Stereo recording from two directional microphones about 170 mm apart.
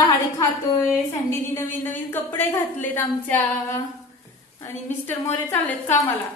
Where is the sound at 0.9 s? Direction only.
15° left (ahead or behind).